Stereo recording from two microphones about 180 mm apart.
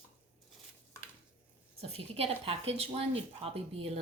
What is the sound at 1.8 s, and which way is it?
A woman's voice, 35° right (ahead or behind).